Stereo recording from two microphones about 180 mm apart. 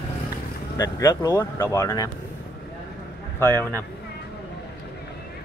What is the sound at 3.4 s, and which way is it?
Speech, 10° left (ahead or behind).